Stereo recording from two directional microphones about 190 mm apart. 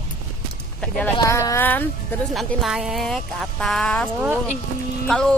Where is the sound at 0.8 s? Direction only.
5° left (ahead or behind).